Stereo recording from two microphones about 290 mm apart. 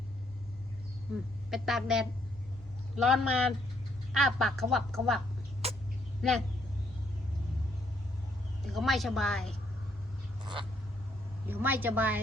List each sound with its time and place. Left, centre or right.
1.5 s speech: centre
5.6 s vehicle: right
6.2 s speech: centre
8.6 s speech: centre
11.4 s a woman's voice: centre